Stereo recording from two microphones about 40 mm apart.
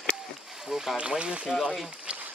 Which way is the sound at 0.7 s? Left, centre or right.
Centre.